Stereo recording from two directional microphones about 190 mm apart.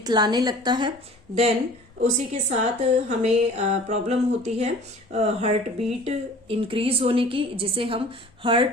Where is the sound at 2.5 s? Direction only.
35° right (ahead or behind).